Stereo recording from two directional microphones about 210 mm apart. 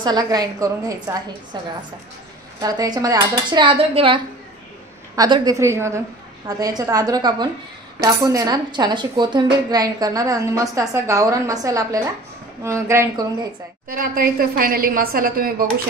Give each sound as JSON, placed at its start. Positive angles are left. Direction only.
{"t": 0.0, "sound": "speech", "side_deg": -20}
{"t": 2.6, "sound": "speech", "side_deg": -15}
{"t": 13.8, "sound": "a woman's voice", "side_deg": -45}